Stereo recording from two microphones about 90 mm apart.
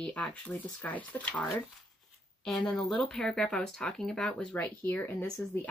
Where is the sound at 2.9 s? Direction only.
5° left (ahead or behind); by 5.6 s 25° left (ahead or behind).